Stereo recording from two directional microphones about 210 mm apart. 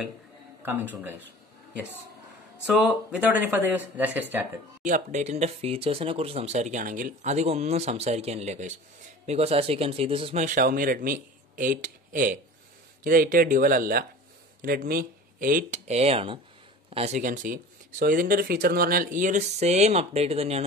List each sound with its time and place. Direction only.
0.6 s a man's voice: 10° right (ahead or behind)
2.6 s speech: 5° right (ahead or behind)
4.8 s speech: 35° right (ahead or behind)